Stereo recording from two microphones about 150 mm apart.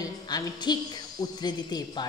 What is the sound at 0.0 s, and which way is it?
A woman's voice, 25° left (ahead or behind).